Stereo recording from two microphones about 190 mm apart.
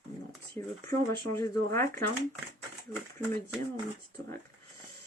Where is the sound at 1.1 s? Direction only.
15° left (ahead or behind).